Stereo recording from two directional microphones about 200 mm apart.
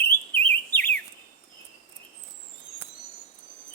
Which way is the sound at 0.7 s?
10° left (ahead or behind).